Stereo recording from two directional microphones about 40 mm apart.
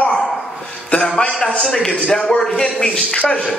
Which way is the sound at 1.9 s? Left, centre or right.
Left.